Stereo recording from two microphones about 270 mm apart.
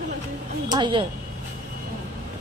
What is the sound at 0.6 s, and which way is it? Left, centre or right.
Speech, centre.